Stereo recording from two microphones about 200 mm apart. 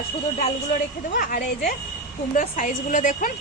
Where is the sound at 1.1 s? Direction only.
45° left (ahead or behind).